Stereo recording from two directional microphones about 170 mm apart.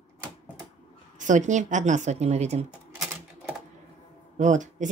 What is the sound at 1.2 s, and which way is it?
Speech, 45° right (ahead or behind).